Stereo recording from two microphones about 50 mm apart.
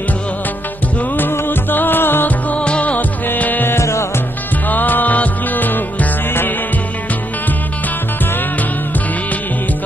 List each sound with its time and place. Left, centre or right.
1.3 s music: left
2.5 s music: left
3.7 s music: left
4.6 s music: left